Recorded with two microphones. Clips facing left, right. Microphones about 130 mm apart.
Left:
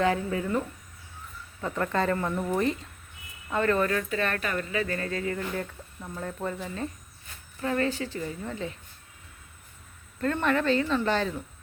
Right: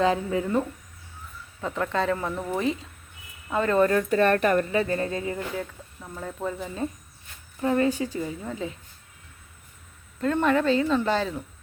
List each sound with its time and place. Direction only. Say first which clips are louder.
0.0 s speech: right 3 dB; 20° right (ahead or behind)
1.6 s speech: right 1 dB; centre (ahead or behind)
3.8 s speech: right 6 dB; 30° right (ahead or behind)
4.1 s speech: right 9 dB; 45° right (ahead or behind)
4.7 s speech: right 5 dB; 25° right (ahead or behind)
5.5 s speech: right 1 dB; 5° right (ahead or behind)
10.3 s speech: right 4 dB; 10° right (ahead or behind)